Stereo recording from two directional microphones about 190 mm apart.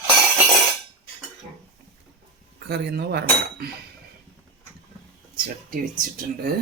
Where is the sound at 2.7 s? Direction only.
60° right (ahead or behind).